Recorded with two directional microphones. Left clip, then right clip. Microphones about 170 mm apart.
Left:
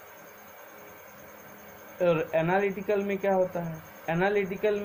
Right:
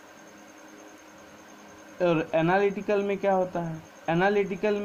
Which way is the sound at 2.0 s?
55° right (ahead or behind).